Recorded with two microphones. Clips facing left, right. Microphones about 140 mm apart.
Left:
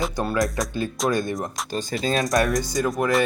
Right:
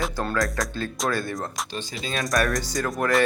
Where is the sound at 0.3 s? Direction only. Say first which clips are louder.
Left 3 dB; 25° left (ahead or behind).